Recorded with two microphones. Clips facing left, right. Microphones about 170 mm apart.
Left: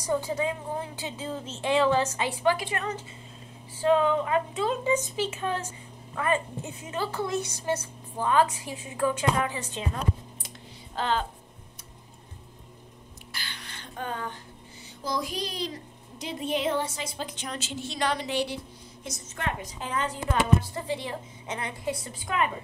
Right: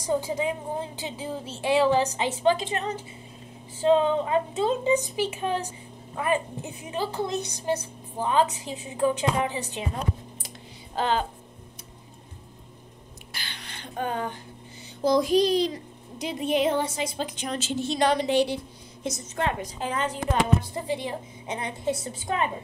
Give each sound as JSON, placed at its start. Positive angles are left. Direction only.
{"t": 0.0, "sound": "a woman's voice", "side_deg": -15}
{"t": 11.0, "sound": "a woman's voice", "side_deg": -5}
{"t": 13.3, "sound": "a sound", "side_deg": -20}
{"t": 15.0, "sound": "a woman's voice", "side_deg": -25}
{"t": 20.7, "sound": "a woman's voice", "side_deg": -15}